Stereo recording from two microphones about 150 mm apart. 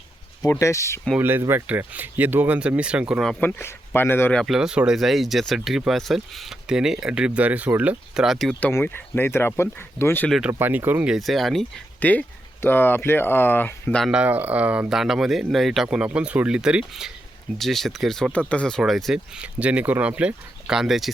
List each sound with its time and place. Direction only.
0.6 s speech: 20° left (ahead or behind)
1.2 s speech: 15° right (ahead or behind)
3.4 s speech: 15° left (ahead or behind)
8.7 s speech: 15° left (ahead or behind)
10.2 s speech: centre (ahead or behind)
10.5 s speech: 15° right (ahead or behind)
11.9 s speech: 10° left (ahead or behind)
14.0 s speech: 5° right (ahead or behind)